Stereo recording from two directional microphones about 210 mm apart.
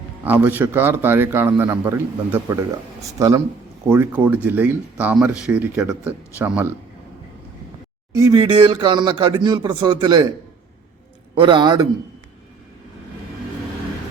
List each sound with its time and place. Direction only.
0.3 s a man's voice: 10° right (ahead or behind)
8.1 s speech: 15° right (ahead or behind)
11.3 s speech: 20° right (ahead or behind)